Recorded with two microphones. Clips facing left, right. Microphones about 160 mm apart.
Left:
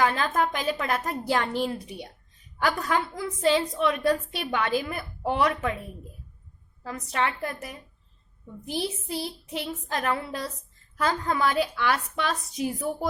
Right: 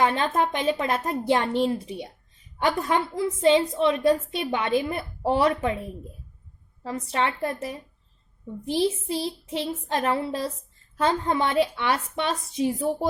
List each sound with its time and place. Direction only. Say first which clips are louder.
0.0 s a woman's voice: right 2 dB; 25° right (ahead or behind)